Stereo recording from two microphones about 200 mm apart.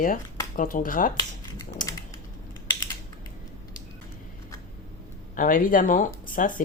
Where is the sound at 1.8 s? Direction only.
40° left (ahead or behind).